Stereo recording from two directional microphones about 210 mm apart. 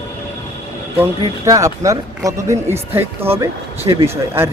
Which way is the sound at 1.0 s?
15° right (ahead or behind).